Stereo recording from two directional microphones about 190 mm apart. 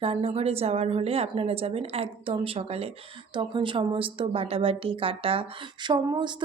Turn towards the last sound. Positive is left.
turn(degrees=-25)  # may be behind; listen again after turning